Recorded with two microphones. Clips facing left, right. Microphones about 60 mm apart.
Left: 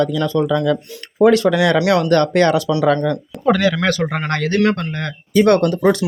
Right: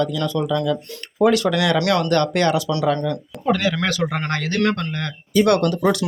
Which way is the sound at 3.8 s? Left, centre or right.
Left.